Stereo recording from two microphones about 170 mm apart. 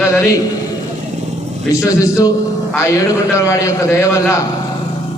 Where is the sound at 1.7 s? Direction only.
20° left (ahead or behind).